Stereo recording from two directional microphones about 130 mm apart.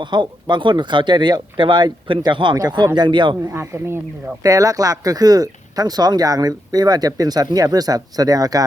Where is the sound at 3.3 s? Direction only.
20° right (ahead or behind).